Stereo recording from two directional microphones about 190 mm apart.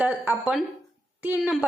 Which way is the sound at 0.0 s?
5° right (ahead or behind).